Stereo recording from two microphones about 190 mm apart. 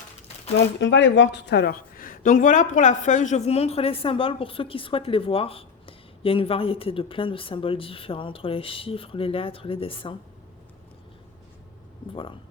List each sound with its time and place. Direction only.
0.5 s speech: 75° left (ahead or behind); by 10.2 s 30° left (ahead or behind)
12.1 s speech: 25° left (ahead or behind)